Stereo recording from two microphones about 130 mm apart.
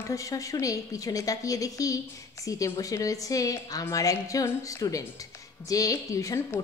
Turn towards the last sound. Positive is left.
turn(degrees=25)  # may be behind; listen again after turning